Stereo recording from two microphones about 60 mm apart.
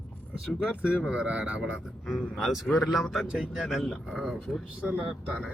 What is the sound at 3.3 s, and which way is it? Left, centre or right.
Speech, centre.